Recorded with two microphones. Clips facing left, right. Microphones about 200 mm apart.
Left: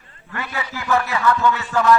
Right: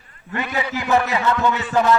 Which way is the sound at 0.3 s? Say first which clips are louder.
Right 5 dB; 20° right (ahead or behind).